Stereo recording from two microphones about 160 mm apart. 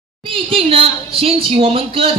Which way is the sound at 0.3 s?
35° right (ahead or behind).